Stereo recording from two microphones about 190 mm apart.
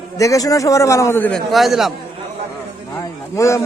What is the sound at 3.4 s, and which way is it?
Speech, 15° left (ahead or behind).